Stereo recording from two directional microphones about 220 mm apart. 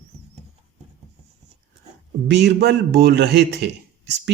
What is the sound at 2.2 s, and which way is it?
A man's voice, 50° right (ahead or behind).